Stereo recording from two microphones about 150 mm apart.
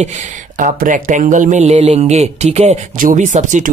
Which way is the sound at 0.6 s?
60° right (ahead or behind).